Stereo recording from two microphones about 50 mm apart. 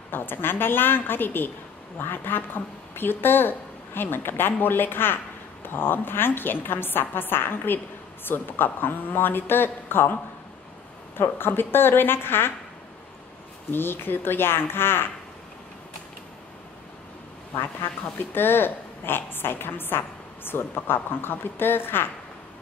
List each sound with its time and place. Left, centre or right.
0.1 s a woman's voice: left
11.1 s a woman's voice: left
13.7 s a woman's voice: left
18.3 s a woman's voice: left